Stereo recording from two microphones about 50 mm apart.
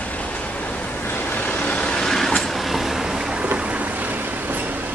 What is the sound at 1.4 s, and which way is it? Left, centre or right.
Vehicle, left.